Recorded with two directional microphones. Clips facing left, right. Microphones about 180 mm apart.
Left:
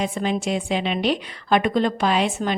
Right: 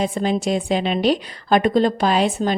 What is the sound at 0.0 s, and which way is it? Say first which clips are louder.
A woman's voice: right 3 dB; 35° right (ahead or behind).